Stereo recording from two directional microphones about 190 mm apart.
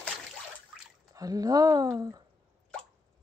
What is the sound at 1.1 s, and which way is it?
Speech, 20° right (ahead or behind).